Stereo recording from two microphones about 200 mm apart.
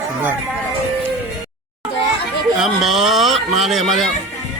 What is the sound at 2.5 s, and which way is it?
Speech, centre (ahead or behind).